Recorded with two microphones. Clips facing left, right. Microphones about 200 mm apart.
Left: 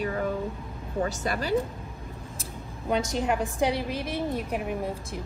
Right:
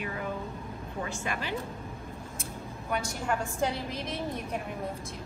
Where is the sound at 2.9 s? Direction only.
20° left (ahead or behind).